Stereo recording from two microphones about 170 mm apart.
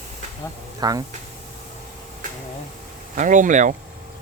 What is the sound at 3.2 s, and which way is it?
Speech, 50° right (ahead or behind).